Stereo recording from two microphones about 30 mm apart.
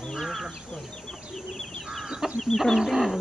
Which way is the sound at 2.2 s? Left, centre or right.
Centre.